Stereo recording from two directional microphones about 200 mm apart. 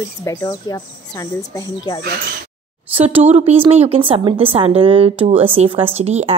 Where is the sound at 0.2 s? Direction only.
15° left (ahead or behind).